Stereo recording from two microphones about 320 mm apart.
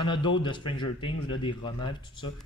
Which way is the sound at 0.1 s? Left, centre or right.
Centre.